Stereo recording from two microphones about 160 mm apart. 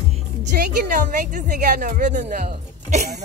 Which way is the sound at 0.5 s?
60° right (ahead or behind).